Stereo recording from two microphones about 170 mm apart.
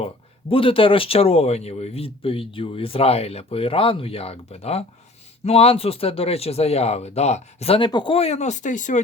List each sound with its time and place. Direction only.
0.0 s speech: 30° left (ahead or behind)